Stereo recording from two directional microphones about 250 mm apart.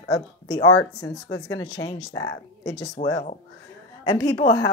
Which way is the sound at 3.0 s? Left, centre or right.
Left.